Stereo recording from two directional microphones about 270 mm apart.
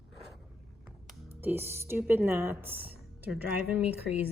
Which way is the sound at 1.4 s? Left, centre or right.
Centre.